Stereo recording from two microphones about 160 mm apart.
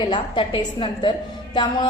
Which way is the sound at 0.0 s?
30° left (ahead or behind).